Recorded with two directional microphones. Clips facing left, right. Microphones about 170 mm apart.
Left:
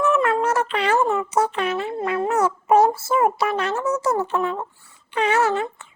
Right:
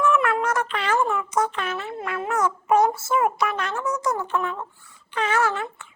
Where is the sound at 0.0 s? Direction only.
25° left (ahead or behind).